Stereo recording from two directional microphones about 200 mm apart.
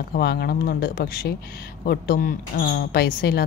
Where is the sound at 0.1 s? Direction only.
50° left (ahead or behind).